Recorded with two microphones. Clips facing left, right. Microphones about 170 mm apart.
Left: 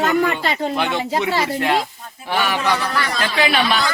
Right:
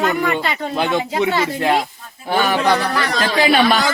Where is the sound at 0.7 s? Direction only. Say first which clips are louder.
Right 2 dB; 30° right (ahead or behind).